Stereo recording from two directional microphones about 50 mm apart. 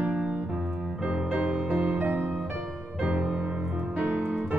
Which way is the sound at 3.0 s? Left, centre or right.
Centre.